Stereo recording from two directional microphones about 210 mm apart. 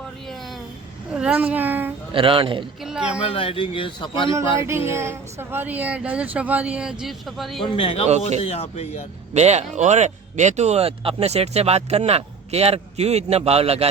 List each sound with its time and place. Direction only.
1.1 s a sound: 5° right (ahead or behind)
2.1 s speech: 25° right (ahead or behind)
2.8 s speech: 5° right (ahead or behind)
3.2 s a man's voice: 25° left (ahead or behind)
4.9 s speech: 10° right (ahead or behind)
7.6 s a man's voice: 25° left (ahead or behind)
9.3 s speech: 30° right (ahead or behind)